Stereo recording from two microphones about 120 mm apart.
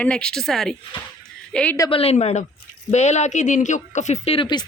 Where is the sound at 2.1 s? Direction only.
75° left (ahead or behind).